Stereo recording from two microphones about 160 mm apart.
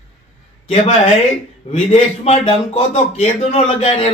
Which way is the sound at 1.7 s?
40° left (ahead or behind).